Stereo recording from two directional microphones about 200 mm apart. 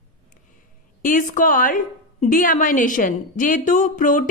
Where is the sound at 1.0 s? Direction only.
40° left (ahead or behind).